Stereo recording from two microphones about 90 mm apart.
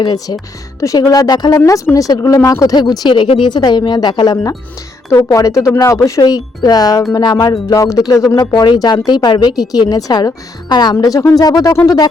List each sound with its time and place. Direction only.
0.0 s speech: 50° left (ahead or behind)
0.8 s speech: 35° left (ahead or behind)
5.3 s speech: 35° left (ahead or behind); by 7.6 s 55° left (ahead or behind)
7.7 s speech: 40° left (ahead or behind)
8.4 s speech: 55° left (ahead or behind)
11.0 s speech: 40° left (ahead or behind)